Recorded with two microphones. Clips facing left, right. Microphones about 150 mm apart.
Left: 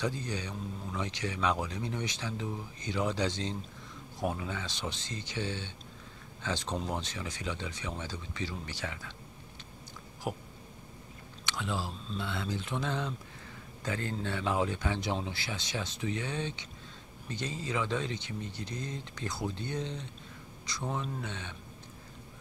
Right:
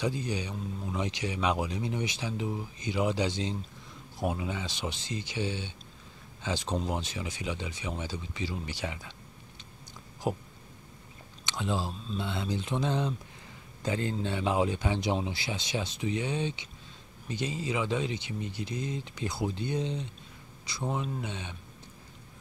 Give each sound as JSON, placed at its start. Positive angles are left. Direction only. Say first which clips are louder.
{"t": 0.0, "sound": "speech", "louder": "right 3 dB", "side_deg": -10}
{"t": 10.3, "sound": "speech", "louder": "right 5 dB", "side_deg": -25}
{"t": 11.4, "sound": "speech", "louder": "right 3 dB", "side_deg": -20}